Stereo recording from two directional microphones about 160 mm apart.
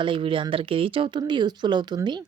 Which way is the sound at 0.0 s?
30° right (ahead or behind).